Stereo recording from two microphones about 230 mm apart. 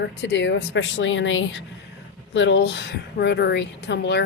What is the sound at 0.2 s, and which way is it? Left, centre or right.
A woman's voice, left.